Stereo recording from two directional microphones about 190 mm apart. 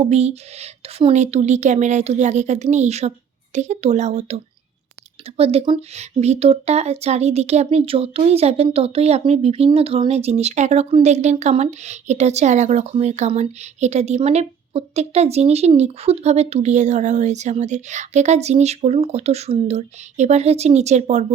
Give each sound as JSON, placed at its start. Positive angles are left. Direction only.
{"t": 0.0, "sound": "a woman's voice", "side_deg": -35}
{"t": 5.4, "sound": "a woman's voice", "side_deg": -30}